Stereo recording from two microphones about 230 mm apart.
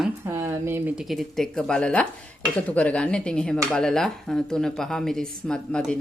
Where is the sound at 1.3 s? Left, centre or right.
Centre.